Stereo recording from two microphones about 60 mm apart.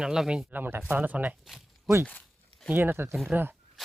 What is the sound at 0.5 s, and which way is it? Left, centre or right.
Speech, right.